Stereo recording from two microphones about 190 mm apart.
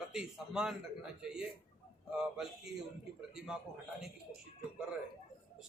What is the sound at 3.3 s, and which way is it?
Speech, 5° right (ahead or behind).